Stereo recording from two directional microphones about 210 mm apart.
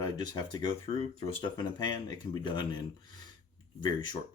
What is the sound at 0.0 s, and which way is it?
Speech, 20° left (ahead or behind).